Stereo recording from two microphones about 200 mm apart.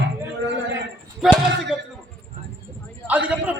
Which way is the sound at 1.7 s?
25° left (ahead or behind).